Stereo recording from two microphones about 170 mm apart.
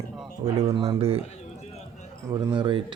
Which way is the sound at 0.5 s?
35° right (ahead or behind).